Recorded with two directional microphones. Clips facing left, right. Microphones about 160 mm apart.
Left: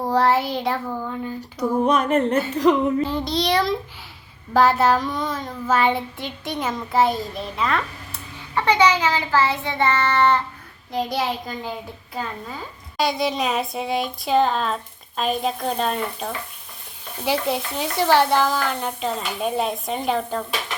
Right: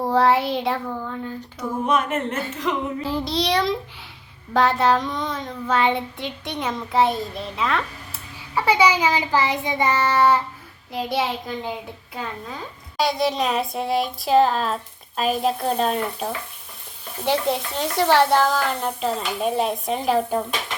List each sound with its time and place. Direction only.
0.0 s a child's voice: centre (ahead or behind)
1.0 s speech: 10° left (ahead or behind)
1.8 s a sound: 35° left (ahead or behind)
3.0 s a child's voice: centre (ahead or behind)
8.5 s child singing: 10° right (ahead or behind)
10.9 s a child's voice: centre (ahead or behind)